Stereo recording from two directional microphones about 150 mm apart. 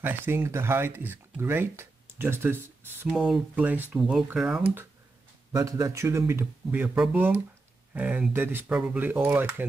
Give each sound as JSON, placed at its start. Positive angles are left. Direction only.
{"t": 0.0, "sound": "speech", "side_deg": -15}
{"t": 3.1, "sound": "speech", "side_deg": -5}
{"t": 5.5, "sound": "speech", "side_deg": -20}